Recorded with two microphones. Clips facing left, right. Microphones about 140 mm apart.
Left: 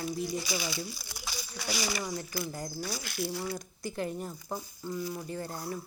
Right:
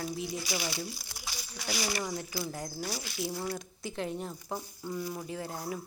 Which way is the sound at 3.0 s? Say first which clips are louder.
Left 2 dB; 55° left (ahead or behind).